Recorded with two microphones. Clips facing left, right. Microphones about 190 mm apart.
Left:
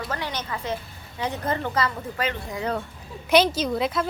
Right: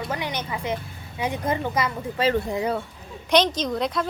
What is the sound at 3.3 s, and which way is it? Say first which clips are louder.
Speech: left 1 dB; 5° left (ahead or behind).